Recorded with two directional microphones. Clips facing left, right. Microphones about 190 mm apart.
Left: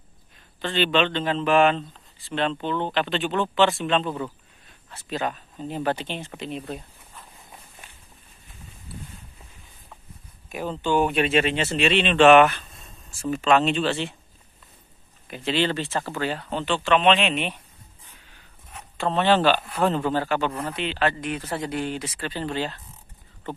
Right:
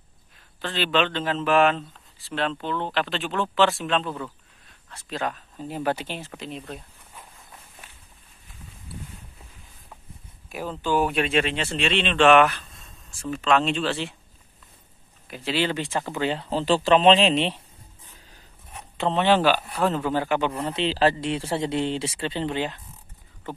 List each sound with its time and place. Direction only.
0.6 s speech: centre (ahead or behind)
10.5 s speech: centre (ahead or behind)
15.2 s speech: 5° right (ahead or behind); by 17.6 s 30° right (ahead or behind)
18.9 s a man's voice: 20° right (ahead or behind)
20.7 s speech: 30° right (ahead or behind)